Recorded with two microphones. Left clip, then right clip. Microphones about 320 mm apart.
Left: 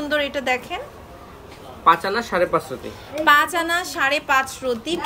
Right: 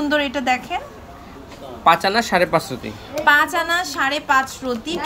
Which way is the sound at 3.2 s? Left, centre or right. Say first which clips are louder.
Right 1 dB; centre.